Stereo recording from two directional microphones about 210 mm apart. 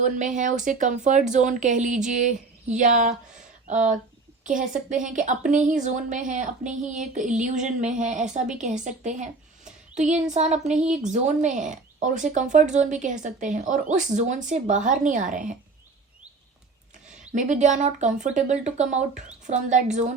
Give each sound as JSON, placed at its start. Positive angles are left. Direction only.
{"t": 0.0, "sound": "a woman's voice", "side_deg": -35}
{"t": 5.0, "sound": "a woman's voice", "side_deg": -35}
{"t": 17.3, "sound": "a woman's voice", "side_deg": -35}